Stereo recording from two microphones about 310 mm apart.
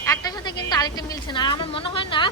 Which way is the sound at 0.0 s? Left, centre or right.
Centre.